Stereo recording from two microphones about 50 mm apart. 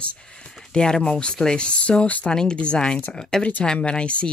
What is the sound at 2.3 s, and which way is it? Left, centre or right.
Speech, centre.